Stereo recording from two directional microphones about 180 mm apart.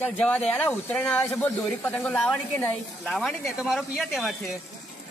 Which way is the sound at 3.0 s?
Centre (ahead or behind).